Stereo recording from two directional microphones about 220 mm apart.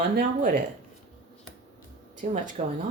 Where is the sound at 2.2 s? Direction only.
35° right (ahead or behind).